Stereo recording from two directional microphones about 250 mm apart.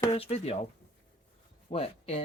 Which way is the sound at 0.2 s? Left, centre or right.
Left.